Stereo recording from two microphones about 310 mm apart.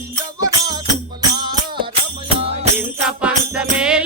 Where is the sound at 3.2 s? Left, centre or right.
Centre.